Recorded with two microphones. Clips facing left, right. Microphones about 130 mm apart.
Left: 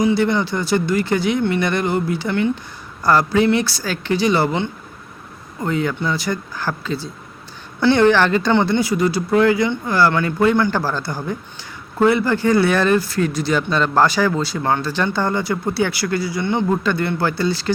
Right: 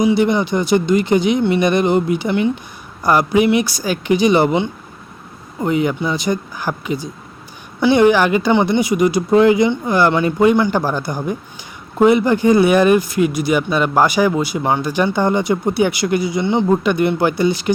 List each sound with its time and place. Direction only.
0.0 s speech: 15° right (ahead or behind)